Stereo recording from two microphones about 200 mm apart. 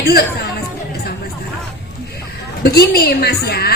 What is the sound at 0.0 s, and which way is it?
Speech, 50° left (ahead or behind).